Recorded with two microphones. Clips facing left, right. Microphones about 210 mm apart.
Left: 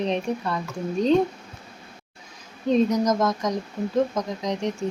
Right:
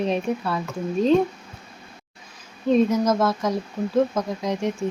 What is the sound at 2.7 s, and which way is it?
Speech, 5° right (ahead or behind).